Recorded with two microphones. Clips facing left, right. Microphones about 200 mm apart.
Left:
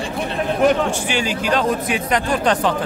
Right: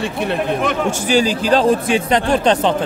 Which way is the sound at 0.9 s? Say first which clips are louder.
Right 6 dB; 40° right (ahead or behind).